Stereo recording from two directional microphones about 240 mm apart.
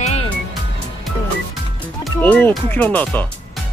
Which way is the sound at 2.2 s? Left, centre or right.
Centre.